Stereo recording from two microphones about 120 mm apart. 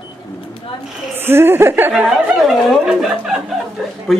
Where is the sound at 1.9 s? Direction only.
5° right (ahead or behind).